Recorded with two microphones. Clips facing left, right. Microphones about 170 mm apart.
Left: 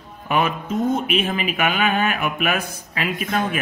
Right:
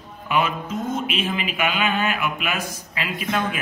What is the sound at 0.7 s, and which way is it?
Music, centre (ahead or behind).